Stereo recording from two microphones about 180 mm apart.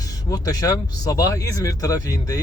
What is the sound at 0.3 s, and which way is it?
Speech, 20° left (ahead or behind).